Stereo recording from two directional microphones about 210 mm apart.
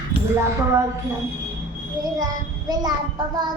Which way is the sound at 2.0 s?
20° right (ahead or behind).